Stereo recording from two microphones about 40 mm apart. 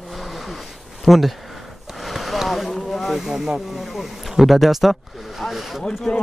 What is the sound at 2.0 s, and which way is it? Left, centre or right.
Vehicle, centre.